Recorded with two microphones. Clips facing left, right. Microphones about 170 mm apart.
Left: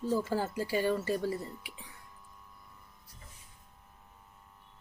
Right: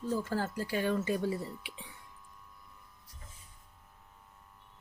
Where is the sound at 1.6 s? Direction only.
25° right (ahead or behind).